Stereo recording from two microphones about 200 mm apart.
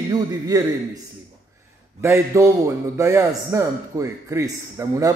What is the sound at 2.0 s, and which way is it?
A man's voice, 15° right (ahead or behind).